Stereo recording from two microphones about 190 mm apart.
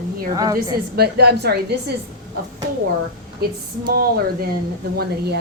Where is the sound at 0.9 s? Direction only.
55° right (ahead or behind).